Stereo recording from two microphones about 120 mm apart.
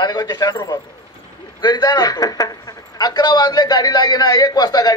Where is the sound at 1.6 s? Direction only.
35° left (ahead or behind).